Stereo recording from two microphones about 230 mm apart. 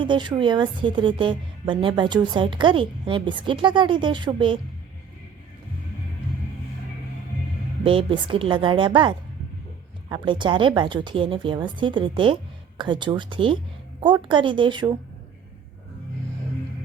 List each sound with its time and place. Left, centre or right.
0.0 s a woman's voice: centre
7.9 s a woman's voice: right